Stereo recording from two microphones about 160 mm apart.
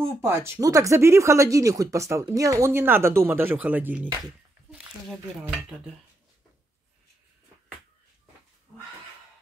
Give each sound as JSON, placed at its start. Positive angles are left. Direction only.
{"t": 0.0, "sound": "speech", "side_deg": -15}